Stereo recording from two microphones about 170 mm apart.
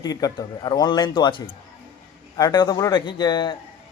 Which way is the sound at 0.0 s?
20° left (ahead or behind).